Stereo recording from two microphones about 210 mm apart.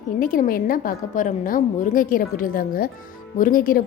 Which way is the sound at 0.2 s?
40° left (ahead or behind).